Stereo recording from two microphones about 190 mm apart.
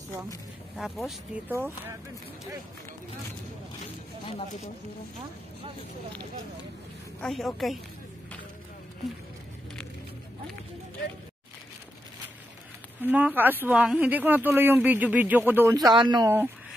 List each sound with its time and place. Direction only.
0.7 s speech: centre (ahead or behind)
3.8 s speech: 30° left (ahead or behind)
7.2 s speech: centre (ahead or behind)
13.0 s speech: 10° right (ahead or behind)